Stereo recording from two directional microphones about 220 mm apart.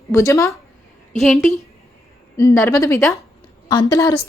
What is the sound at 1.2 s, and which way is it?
Speech, centre (ahead or behind).